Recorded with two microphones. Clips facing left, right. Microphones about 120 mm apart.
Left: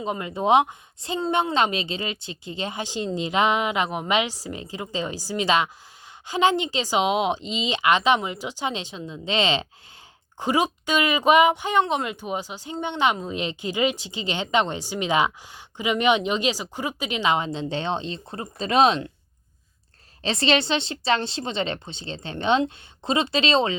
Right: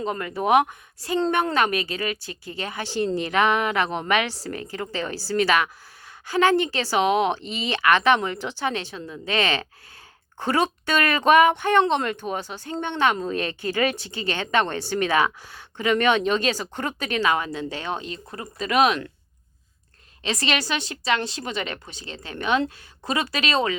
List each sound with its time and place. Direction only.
0.0 s speech: 20° left (ahead or behind)
20.2 s speech: 30° left (ahead or behind)